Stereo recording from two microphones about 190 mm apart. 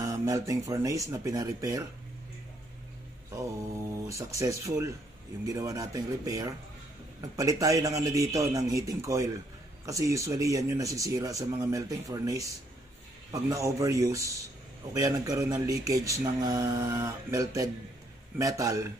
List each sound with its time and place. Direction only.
0.0 s speech: 20° right (ahead or behind)
3.3 s speech: 15° right (ahead or behind)